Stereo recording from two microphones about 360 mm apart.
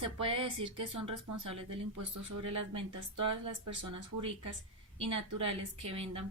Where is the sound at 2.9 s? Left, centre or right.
Right.